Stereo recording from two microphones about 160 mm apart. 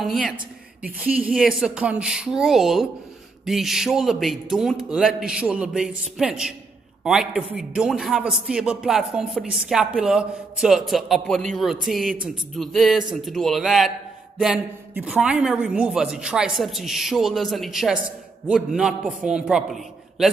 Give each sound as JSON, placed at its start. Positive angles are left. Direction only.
{"t": 0.0, "sound": "speech", "side_deg": 0}